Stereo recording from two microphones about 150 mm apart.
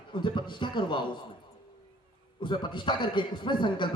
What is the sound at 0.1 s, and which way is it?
A man's voice, 30° left (ahead or behind).